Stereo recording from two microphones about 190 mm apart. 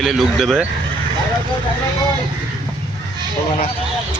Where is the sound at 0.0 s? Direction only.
Centre (ahead or behind).